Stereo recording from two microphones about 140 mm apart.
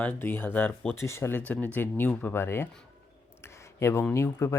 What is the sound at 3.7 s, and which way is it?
Speech, 20° left (ahead or behind).